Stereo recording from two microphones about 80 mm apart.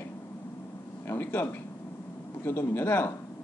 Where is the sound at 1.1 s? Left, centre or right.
Left.